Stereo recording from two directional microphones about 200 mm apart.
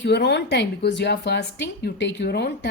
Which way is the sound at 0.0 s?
60° left (ahead or behind).